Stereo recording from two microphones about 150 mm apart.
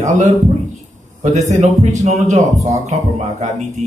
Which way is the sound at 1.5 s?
50° right (ahead or behind).